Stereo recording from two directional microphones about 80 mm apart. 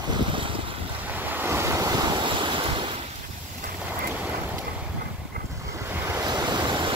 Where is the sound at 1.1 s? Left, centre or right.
Right.